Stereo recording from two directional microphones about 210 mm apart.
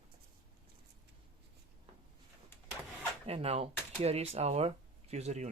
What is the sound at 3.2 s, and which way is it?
Speech, 30° right (ahead or behind).